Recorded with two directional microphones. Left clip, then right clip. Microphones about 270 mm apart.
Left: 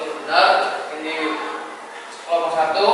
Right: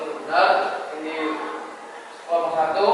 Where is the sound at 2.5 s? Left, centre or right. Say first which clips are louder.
Left 2 dB; centre.